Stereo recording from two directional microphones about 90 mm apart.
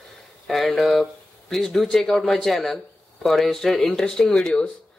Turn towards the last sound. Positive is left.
turn(degrees=10)  # may be behind; listen again after turning